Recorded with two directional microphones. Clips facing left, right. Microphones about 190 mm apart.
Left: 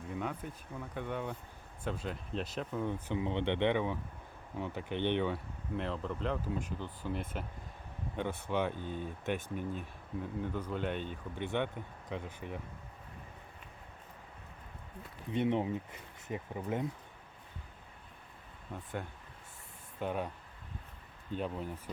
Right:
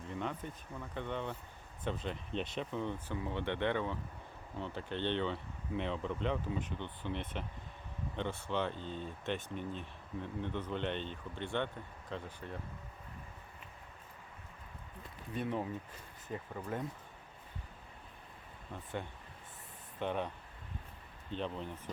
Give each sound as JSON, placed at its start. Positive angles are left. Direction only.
{"t": 0.1, "sound": "speech", "side_deg": 5}
{"t": 5.7, "sound": "speech", "side_deg": 0}
{"t": 15.3, "sound": "speech", "side_deg": 20}
{"t": 20.0, "sound": "speech", "side_deg": 5}